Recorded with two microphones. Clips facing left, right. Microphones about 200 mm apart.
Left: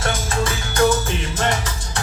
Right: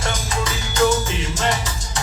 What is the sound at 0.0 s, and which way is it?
Music, 50° left (ahead or behind).